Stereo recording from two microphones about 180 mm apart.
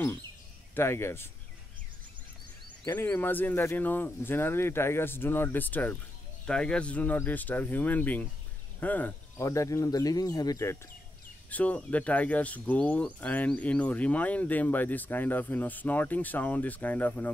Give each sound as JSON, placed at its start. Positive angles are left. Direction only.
{"t": 0.7, "sound": "speech", "side_deg": 15}
{"t": 2.9, "sound": "speech", "side_deg": 10}